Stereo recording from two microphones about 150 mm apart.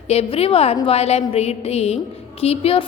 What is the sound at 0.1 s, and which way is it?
A woman's voice, 40° left (ahead or behind).